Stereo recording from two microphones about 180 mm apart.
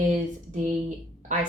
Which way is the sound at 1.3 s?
45° right (ahead or behind).